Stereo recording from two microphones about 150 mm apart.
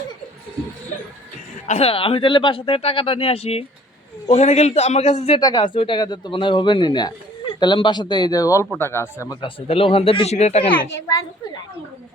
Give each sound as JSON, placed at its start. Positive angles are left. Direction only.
{"t": 1.6, "sound": "a man's voice", "side_deg": 45}
{"t": 5.4, "sound": "speech", "side_deg": 25}
{"t": 9.4, "sound": "speech", "side_deg": 40}